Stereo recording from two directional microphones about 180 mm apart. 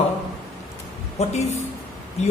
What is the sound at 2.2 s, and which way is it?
Speech, 40° left (ahead or behind).